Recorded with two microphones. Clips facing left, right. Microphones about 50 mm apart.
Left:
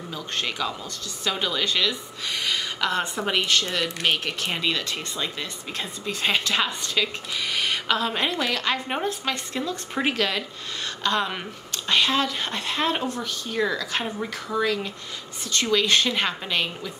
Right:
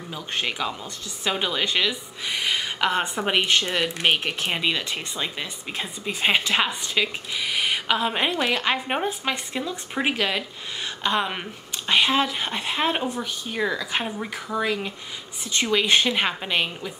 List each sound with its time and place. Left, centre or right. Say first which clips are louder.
0.1 s a woman's voice: right 2 dB; centre